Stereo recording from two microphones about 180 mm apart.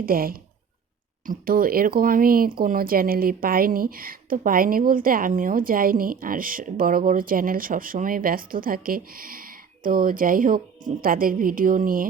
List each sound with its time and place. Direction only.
0.0 s a woman's voice: 55° right (ahead or behind)